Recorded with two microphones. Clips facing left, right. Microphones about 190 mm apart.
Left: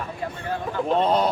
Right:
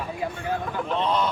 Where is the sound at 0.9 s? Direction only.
40° left (ahead or behind).